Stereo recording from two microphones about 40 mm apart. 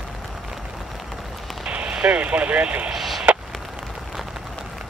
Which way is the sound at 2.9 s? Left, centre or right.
Centre.